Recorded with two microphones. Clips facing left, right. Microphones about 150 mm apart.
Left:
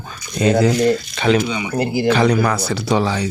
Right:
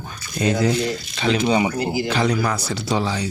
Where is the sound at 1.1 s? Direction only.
55° left (ahead or behind).